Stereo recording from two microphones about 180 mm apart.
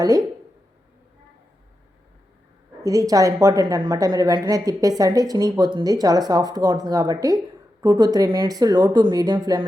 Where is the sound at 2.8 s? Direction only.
20° right (ahead or behind).